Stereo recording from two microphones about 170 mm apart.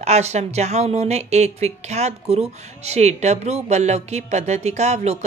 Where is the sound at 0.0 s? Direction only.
40° right (ahead or behind).